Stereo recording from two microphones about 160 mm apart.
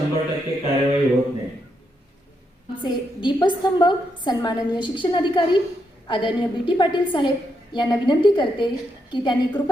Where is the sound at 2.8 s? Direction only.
30° left (ahead or behind).